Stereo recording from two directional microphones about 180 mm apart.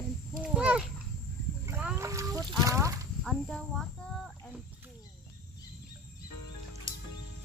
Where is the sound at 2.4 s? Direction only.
20° right (ahead or behind).